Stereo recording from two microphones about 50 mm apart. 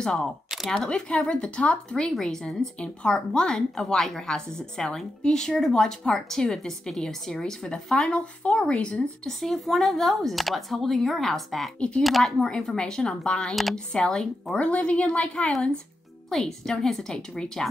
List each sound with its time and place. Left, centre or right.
0.0 s speech: centre
0.8 s a woman's voice: left
2.0 s a woman's voice: centre
9.2 s a woman's voice: centre; by 15.3 s left
16.3 s a woman's voice: centre